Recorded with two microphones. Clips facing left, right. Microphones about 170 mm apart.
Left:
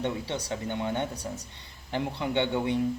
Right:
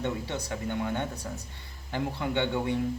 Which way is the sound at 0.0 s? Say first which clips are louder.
Left 1 dB; 20° left (ahead or behind).